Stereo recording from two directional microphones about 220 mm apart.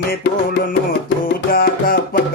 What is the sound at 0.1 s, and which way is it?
Music, 45° left (ahead or behind).